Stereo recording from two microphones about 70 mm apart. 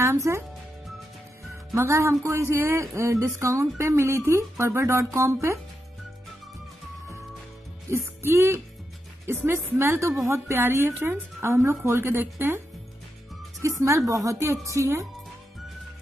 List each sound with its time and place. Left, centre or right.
0.0 s speech: right
1.8 s speech: right
7.9 s music: right
9.4 s speech: right
13.6 s a woman's voice: right